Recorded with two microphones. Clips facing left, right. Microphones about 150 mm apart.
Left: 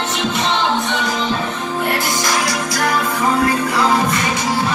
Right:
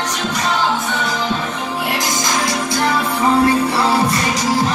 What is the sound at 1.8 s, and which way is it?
Music, 15° right (ahead or behind).